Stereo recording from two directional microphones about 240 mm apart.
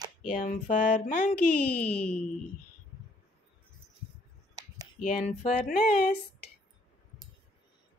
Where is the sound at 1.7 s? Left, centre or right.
Centre.